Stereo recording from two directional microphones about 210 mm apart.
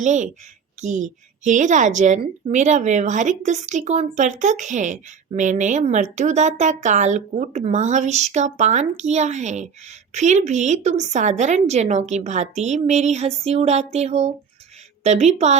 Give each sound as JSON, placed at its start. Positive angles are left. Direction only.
{"t": 0.0, "sound": "a woman's voice", "side_deg": -35}